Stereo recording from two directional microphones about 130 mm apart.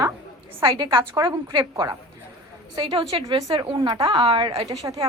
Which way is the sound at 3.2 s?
30° right (ahead or behind).